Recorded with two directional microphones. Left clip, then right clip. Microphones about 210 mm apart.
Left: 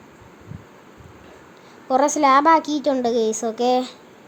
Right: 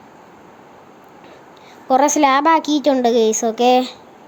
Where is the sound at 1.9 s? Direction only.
5° right (ahead or behind).